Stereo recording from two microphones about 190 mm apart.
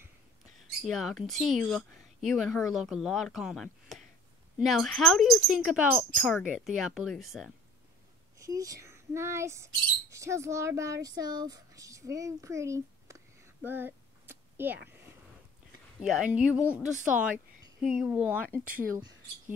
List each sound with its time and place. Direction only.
0.8 s speech: centre (ahead or behind)
8.4 s speech: 20° right (ahead or behind)
11.1 s a sound: 20° right (ahead or behind)
16.0 s speech: 5° right (ahead or behind)